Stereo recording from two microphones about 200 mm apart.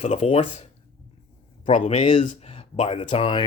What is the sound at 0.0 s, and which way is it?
Speech, 30° left (ahead or behind).